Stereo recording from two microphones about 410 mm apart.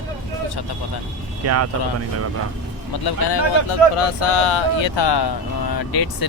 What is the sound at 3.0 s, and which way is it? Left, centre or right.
Speech, left.